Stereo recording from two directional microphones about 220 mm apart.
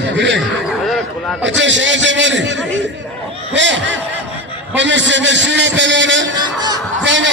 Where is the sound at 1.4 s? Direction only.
55° right (ahead or behind).